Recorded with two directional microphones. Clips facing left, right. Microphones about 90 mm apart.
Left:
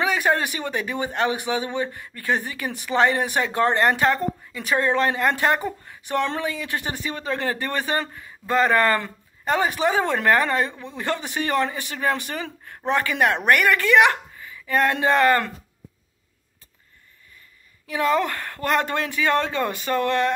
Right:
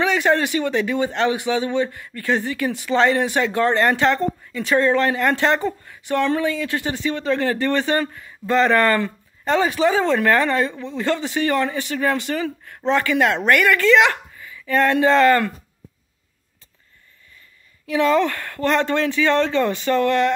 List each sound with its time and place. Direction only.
0.0 s a man's voice: 15° left (ahead or behind)
17.9 s a man's voice: 15° left (ahead or behind)